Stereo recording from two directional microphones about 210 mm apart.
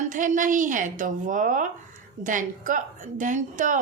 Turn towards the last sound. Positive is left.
turn(degrees=-40)  # may be behind; listen again after turning